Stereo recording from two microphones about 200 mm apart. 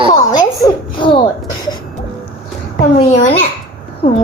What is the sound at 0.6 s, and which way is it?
Speech, 25° left (ahead or behind).